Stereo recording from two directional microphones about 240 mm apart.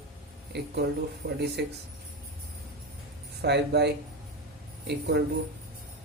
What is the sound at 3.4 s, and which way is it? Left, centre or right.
Speech, right.